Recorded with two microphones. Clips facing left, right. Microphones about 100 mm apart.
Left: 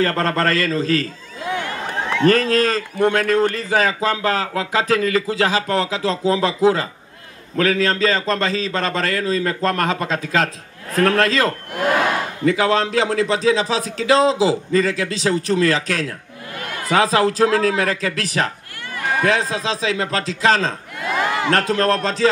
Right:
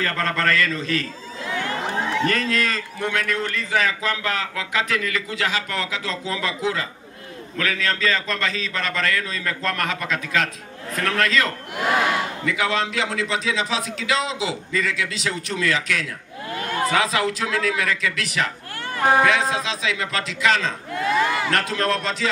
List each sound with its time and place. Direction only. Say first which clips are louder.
0.0 s a man's voice: left 5 dB; 35° left (ahead or behind)
2.0 s a sound: left 9 dB; 55° left (ahead or behind)
2.3 s a man's voice: left 6 dB; 40° left (ahead or behind)
11.8 s speech: left 3 dB; 50° left (ahead or behind)
12.4 s a man's voice: left 8 dB; 35° left (ahead or behind)
18.9 s a sound: right 5 dB; 35° right (ahead or behind)
19.5 s a man's voice: left 3 dB; 35° left (ahead or behind)
21.1 s a man's voice: left 2 dB; 50° left (ahead or behind)